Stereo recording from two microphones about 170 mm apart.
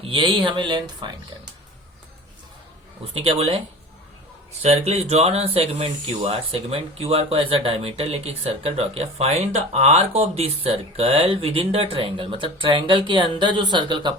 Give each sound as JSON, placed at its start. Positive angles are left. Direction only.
{"t": 0.1, "sound": "speech", "side_deg": -30}
{"t": 3.2, "sound": "speech", "side_deg": -35}
{"t": 4.6, "sound": "speech", "side_deg": -35}